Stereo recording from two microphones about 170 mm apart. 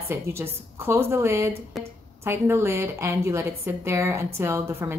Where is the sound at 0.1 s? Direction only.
15° right (ahead or behind).